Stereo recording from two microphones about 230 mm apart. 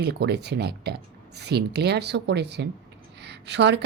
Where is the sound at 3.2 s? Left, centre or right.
Right.